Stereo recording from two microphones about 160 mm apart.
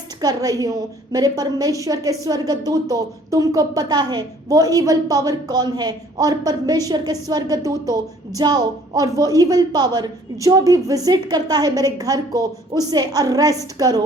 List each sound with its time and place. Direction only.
0.2 s a woman's voice: 25° right (ahead or behind)